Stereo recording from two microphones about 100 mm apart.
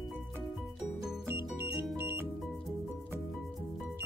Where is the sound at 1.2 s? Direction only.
20° right (ahead or behind).